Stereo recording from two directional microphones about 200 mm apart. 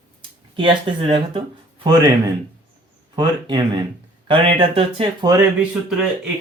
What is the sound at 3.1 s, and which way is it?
Speech, 20° right (ahead or behind).